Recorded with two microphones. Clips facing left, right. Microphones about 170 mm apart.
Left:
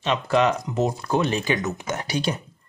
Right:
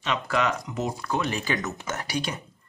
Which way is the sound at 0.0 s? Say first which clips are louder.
Left 5 dB; 25° left (ahead or behind).